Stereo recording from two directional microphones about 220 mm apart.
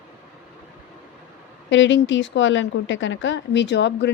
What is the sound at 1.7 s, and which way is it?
Speech, 55° left (ahead or behind).